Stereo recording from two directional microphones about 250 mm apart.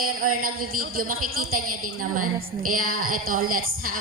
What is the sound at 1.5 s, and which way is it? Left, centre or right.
Speech, right.